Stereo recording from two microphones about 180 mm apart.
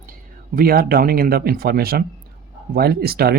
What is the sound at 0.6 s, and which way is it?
Speech, 55° right (ahead or behind).